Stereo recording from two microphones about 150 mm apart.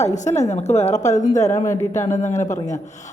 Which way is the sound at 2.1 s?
55° left (ahead or behind).